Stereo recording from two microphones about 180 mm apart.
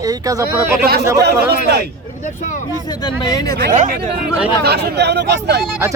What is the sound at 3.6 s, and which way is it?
Speech, 45° right (ahead or behind).